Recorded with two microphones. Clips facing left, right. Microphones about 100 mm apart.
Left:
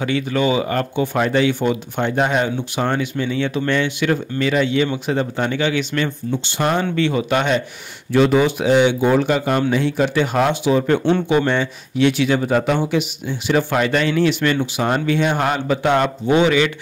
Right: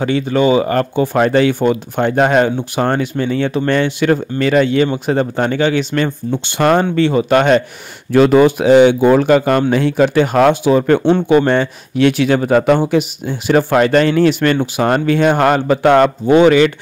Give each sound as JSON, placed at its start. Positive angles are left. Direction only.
{"t": 0.0, "sound": "speech", "side_deg": -35}
{"t": 6.4, "sound": "speech", "side_deg": -55}
{"t": 7.0, "sound": "speech", "side_deg": -35}